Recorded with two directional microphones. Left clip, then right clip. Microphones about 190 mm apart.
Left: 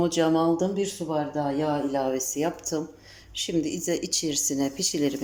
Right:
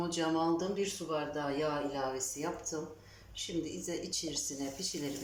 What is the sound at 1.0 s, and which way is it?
Speech, 10° left (ahead or behind).